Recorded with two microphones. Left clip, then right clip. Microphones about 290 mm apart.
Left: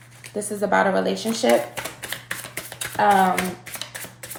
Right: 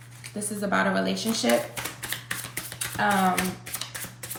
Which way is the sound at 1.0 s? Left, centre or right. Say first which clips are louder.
Left 4 dB; centre.